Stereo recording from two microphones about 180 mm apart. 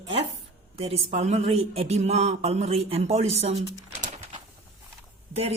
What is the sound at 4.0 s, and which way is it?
Pigeon, 45° right (ahead or behind).